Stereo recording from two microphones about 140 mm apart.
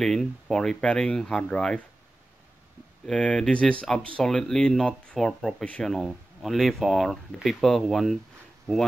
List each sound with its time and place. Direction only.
0.0 s speech: 5° left (ahead or behind)
3.1 s speech: 5° left (ahead or behind)